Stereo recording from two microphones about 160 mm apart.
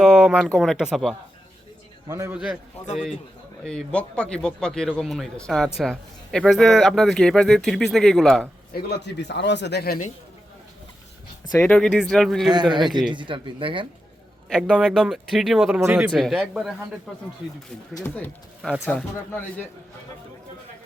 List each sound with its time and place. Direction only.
0.0 s a man's voice: 5° right (ahead or behind)
2.0 s a man's voice: 20° right (ahead or behind)
2.3 s a man's voice: 5° right (ahead or behind)
8.7 s speech: 90° left; by 10.1 s 70° left (ahead or behind)
11.6 s a man's voice: 5° left (ahead or behind)
12.5 s a man's voice: 25° right (ahead or behind)
14.5 s a man's voice: centre (ahead or behind); by 16.0 s 15° right (ahead or behind)
16.1 s a man's voice: centre (ahead or behind)
17.9 s speech: 10° left (ahead or behind)